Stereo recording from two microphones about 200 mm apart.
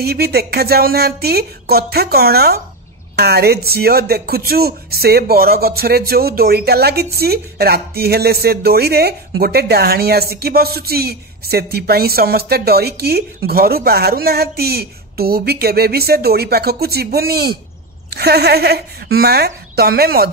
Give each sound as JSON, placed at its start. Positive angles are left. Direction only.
{"t": 0.0, "sound": "speech", "side_deg": -50}